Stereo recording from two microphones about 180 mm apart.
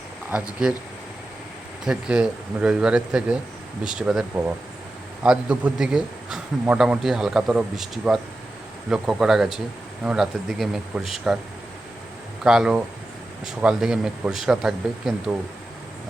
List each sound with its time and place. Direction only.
0.3 s speech: 5° right (ahead or behind)
1.8 s a man's voice: 5° right (ahead or behind)
12.4 s a man's voice: 5° right (ahead or behind)